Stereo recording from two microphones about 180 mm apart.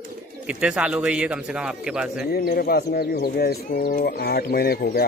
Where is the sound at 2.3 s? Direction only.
60° left (ahead or behind).